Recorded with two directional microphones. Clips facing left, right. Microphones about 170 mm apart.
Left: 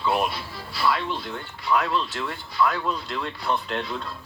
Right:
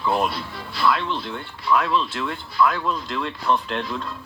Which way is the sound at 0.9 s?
40° left (ahead or behind).